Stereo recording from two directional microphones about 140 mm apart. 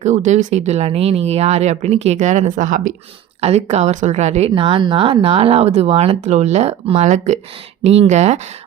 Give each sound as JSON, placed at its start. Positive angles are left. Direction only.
{"t": 0.0, "sound": "speech", "side_deg": -55}
{"t": 3.4, "sound": "speech", "side_deg": -50}
{"t": 6.2, "sound": "speech", "side_deg": -55}